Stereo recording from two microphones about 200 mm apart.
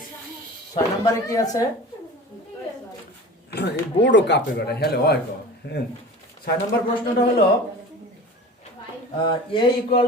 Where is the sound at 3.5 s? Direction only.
60° left (ahead or behind).